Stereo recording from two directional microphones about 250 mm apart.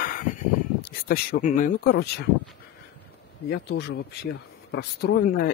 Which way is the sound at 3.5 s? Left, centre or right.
Left.